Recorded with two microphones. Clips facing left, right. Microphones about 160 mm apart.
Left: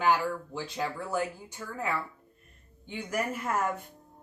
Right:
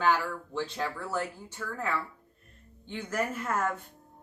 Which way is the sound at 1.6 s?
25° left (ahead or behind).